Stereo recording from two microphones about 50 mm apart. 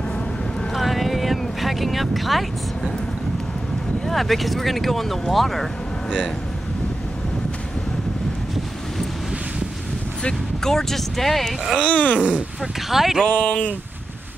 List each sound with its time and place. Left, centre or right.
0.7 s vehicle: centre
4.0 s speech: centre
10.2 s speech: centre
11.8 s speech: left
12.9 s speech: centre
13.5 s speech: left